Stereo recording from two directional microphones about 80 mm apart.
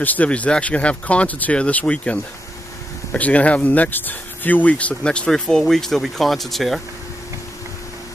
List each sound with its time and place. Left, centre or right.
0.0 s speech: centre